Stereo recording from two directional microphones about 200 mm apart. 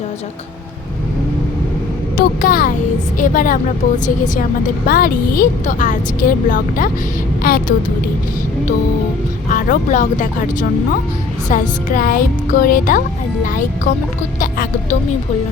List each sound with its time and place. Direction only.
2.1 s a woman's voice: 45° left (ahead or behind)
9.5 s a woman's voice: 40° left (ahead or behind)